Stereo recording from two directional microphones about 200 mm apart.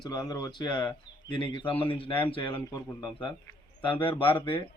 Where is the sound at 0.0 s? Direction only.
20° left (ahead or behind).